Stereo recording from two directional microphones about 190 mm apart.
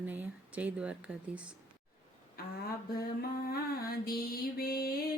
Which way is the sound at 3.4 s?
55° left (ahead or behind).